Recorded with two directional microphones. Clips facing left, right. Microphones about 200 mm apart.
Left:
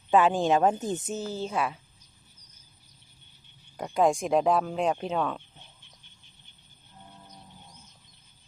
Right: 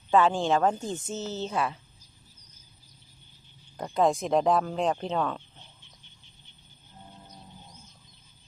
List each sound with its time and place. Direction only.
0.1 s a woman's voice: 15° left (ahead or behind)
3.8 s a woman's voice: 10° left (ahead or behind)